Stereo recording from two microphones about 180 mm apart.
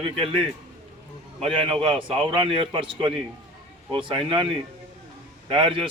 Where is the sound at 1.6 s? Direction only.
30° right (ahead or behind).